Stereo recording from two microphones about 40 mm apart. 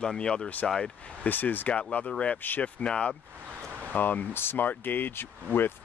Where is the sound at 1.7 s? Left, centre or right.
Left.